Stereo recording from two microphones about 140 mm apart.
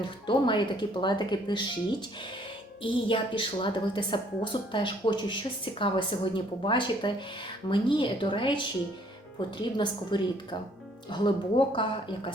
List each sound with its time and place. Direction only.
0.0 s a woman's voice: 35° left (ahead or behind)
9.7 s a woman's voice: 35° left (ahead or behind)